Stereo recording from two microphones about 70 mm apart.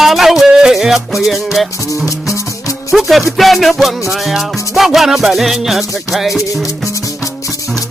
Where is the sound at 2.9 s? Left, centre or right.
Centre.